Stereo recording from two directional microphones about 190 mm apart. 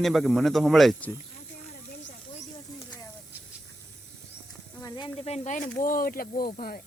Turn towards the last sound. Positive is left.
turn(degrees=50)  # may be behind; listen again after turning